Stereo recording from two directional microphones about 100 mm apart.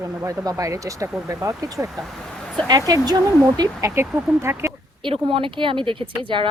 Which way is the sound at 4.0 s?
25° right (ahead or behind).